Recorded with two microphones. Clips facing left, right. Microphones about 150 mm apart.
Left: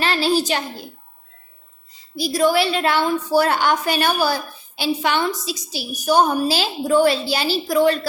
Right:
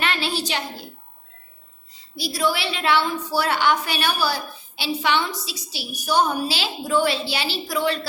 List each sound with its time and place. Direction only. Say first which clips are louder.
0.0 s a child's voice: left 6 dB; 35° left (ahead or behind)
2.1 s a woman's voice: left 7 dB; 45° left (ahead or behind)